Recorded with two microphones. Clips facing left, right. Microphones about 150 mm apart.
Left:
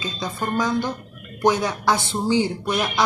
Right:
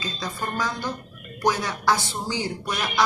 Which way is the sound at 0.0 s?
20° left (ahead or behind).